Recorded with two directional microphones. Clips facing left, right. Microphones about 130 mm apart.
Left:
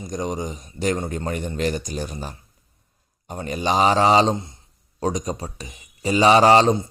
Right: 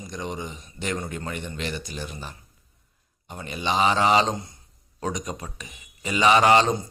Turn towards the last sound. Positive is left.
turn(degrees=35)  # may be behind; listen again after turning